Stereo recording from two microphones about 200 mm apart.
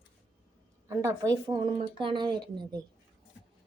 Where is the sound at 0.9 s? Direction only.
15° right (ahead or behind).